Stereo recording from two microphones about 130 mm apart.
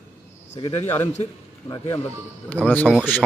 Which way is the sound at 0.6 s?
40° left (ahead or behind).